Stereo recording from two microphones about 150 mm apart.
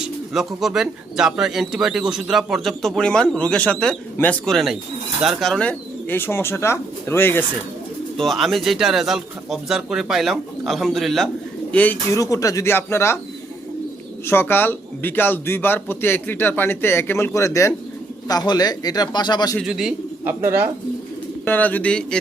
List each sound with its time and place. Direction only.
0.3 s a man's voice: centre (ahead or behind); by 7.4 s 15° left (ahead or behind)
8.1 s a man's voice: centre (ahead or behind)
14.3 s a man's voice: 15° left (ahead or behind)
19.5 s a man's voice: 5° right (ahead or behind)
20.4 s speech: 15° right (ahead or behind)
21.4 s a man's voice: 10° left (ahead or behind)